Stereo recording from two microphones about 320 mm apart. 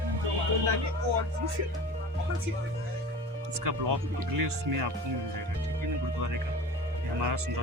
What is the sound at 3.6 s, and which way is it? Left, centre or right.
Speech, right.